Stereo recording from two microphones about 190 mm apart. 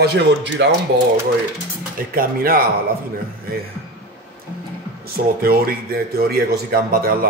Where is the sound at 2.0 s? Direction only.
50° right (ahead or behind).